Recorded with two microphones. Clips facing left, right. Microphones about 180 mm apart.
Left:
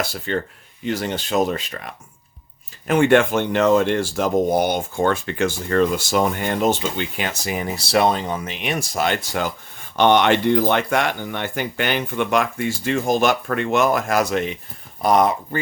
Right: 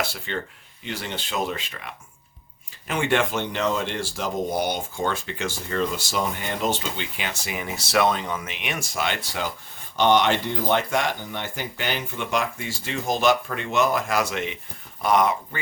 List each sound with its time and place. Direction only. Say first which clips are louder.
0.0 s speech: left 5 dB; 40° left (ahead or behind)
2.8 s speech: left 8 dB; 50° left (ahead or behind)
9.9 s speech: left 4 dB; 60° left (ahead or behind); by 15.4 s 35° left (ahead or behind)